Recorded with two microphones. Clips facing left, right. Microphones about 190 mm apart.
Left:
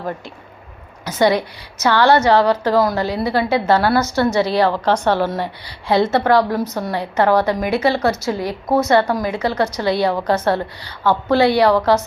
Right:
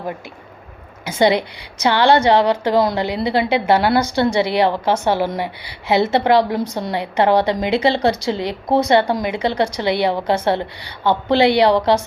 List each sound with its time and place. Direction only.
1.0 s a woman's voice: 15° right (ahead or behind)
9.6 s a woman's voice: 10° right (ahead or behind)
10.1 s a woman's voice: 25° right (ahead or behind)